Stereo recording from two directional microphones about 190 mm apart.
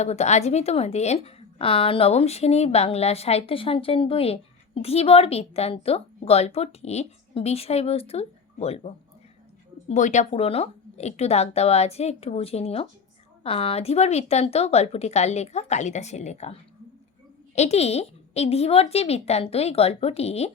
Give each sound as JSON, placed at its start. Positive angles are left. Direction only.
{"t": 0.0, "sound": "a woman's voice", "side_deg": 35}
{"t": 9.9, "sound": "a woman's voice", "side_deg": 40}